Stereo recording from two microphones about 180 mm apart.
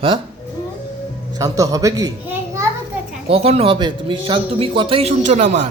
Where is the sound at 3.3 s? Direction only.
35° right (ahead or behind).